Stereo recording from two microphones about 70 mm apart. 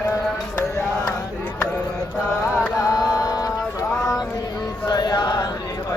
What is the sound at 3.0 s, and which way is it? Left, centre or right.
Music, left.